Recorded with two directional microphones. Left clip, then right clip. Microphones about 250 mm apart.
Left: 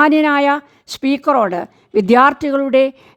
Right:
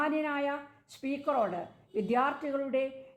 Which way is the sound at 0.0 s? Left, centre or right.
Left.